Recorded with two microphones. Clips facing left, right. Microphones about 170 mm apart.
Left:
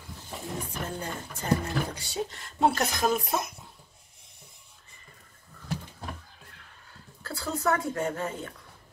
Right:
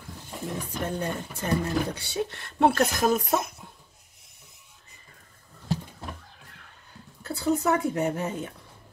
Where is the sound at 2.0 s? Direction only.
65° right (ahead or behind).